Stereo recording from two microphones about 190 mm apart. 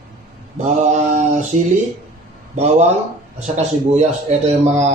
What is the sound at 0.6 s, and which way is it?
Speech, 40° right (ahead or behind).